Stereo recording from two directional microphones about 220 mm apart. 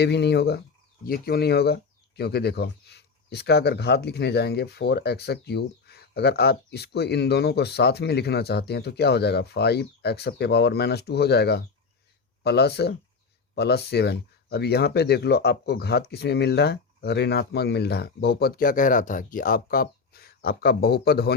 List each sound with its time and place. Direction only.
0.0 s speech: 50° left (ahead or behind)